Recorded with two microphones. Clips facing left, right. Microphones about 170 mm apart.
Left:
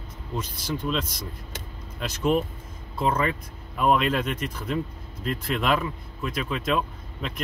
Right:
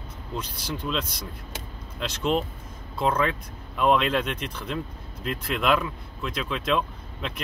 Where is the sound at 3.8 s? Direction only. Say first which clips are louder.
Even; 5° left (ahead or behind).